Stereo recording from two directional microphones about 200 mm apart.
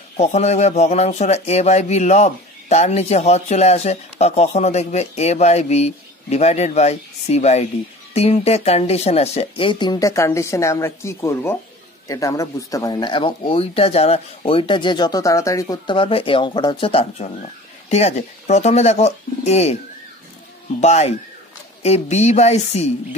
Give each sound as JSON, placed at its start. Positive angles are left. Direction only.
{"t": 0.2, "sound": "speech", "side_deg": 35}
{"t": 20.8, "sound": "speech", "side_deg": 35}